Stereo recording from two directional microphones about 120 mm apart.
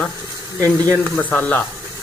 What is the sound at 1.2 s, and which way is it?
Speech, 15° left (ahead or behind).